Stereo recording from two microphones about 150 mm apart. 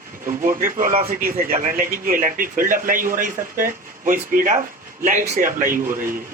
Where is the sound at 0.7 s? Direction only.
65° right (ahead or behind).